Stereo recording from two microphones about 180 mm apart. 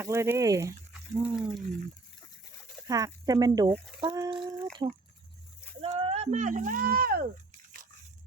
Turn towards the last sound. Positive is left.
turn(degrees=-55)  # may be behind; listen again after turning